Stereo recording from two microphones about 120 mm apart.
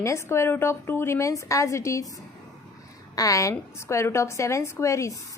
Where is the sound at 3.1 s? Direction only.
30° left (ahead or behind).